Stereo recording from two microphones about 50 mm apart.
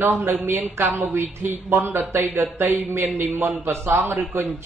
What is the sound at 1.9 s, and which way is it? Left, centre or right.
Speech, right.